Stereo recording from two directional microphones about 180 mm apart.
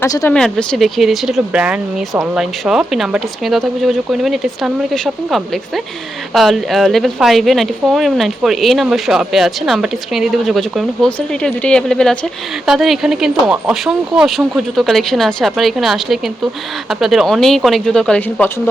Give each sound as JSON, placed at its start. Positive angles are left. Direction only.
{"t": 0.0, "sound": "speech", "side_deg": 15}
{"t": 0.3, "sound": "speech", "side_deg": 5}